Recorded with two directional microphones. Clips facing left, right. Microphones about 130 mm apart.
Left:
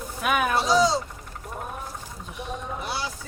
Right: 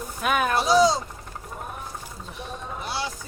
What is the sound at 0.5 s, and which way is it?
Speech, 10° right (ahead or behind).